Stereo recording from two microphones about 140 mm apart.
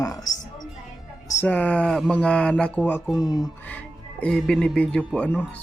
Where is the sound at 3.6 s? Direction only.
10° left (ahead or behind).